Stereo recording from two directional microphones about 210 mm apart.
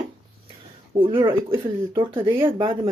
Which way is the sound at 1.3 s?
10° right (ahead or behind).